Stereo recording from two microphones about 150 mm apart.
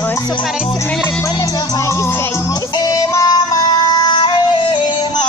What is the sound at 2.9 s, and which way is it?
Yodeling, 25° left (ahead or behind).